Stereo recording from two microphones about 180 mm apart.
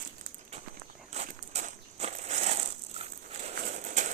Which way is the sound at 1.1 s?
40° right (ahead or behind).